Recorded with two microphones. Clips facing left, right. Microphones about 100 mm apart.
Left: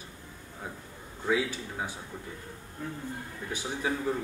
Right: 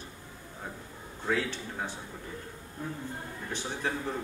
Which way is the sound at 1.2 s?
10° left (ahead or behind).